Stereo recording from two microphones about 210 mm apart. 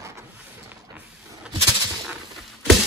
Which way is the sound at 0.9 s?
5° right (ahead or behind).